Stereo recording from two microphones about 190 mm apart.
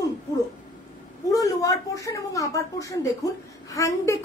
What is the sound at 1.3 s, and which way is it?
A woman's voice, 15° left (ahead or behind).